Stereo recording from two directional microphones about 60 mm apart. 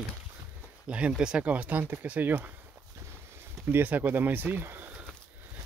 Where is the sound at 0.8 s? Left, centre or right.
Centre.